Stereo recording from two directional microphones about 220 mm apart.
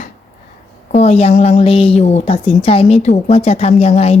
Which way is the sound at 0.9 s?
30° left (ahead or behind).